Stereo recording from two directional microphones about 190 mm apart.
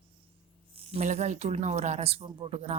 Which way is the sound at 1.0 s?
40° right (ahead or behind).